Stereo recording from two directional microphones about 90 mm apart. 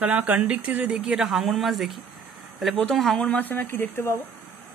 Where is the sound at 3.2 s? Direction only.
15° left (ahead or behind).